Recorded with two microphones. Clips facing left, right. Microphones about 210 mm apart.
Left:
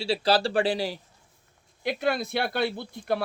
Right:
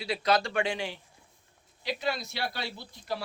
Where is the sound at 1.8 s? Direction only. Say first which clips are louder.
Left 6 dB; 55° left (ahead or behind).